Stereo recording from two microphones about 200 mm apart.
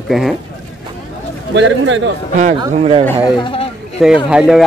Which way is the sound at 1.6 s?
65° right (ahead or behind).